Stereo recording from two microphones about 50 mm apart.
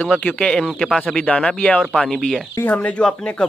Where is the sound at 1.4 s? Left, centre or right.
Left.